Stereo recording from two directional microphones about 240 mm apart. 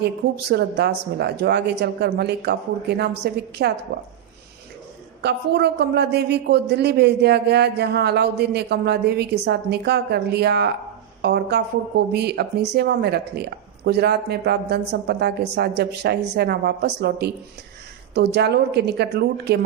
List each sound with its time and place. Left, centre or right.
0.0 s speech: right
5.2 s speech: right